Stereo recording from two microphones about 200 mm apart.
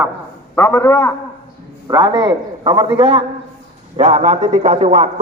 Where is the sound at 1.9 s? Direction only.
20° right (ahead or behind).